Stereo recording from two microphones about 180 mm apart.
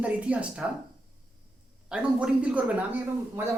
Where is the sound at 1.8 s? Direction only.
5° right (ahead or behind).